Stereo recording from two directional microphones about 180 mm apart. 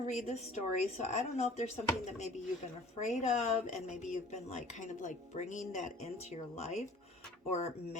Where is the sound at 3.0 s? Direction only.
40° left (ahead or behind).